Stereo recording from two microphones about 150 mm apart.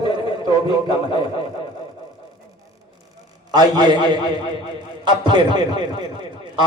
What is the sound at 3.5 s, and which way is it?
A man's voice, 30° right (ahead or behind).